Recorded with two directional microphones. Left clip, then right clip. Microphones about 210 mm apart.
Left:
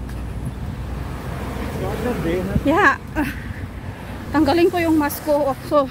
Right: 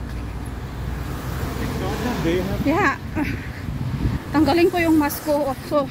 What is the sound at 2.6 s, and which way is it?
Speech, 20° left (ahead or behind).